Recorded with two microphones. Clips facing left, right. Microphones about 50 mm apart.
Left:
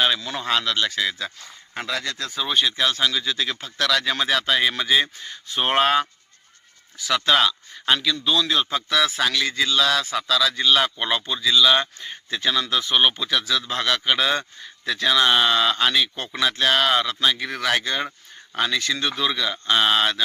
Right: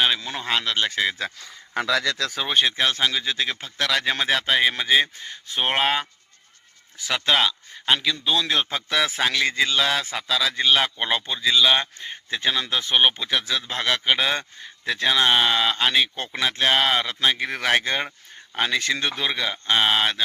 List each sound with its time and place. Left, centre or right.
0.2 s speech: centre
0.8 s speech: right
2.3 s speech: right; by 6.1 s centre
7.3 s speech: centre
8.4 s speech: right